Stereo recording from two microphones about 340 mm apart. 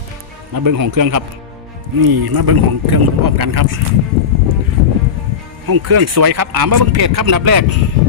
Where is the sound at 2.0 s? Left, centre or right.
Right.